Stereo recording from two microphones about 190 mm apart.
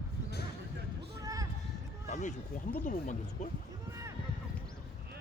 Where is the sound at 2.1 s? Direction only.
40° left (ahead or behind).